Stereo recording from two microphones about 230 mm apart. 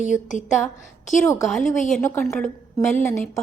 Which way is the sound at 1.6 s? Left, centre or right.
Left.